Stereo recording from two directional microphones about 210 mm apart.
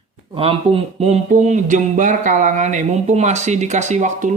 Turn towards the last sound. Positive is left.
turn(degrees=-35)  # may be behind; listen again after turning